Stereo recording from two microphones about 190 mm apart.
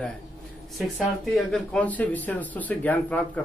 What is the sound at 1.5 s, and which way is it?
Speech, 5° left (ahead or behind).